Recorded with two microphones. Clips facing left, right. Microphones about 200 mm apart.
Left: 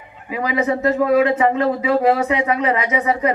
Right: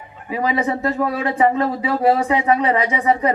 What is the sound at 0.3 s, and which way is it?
Speech, 30° right (ahead or behind).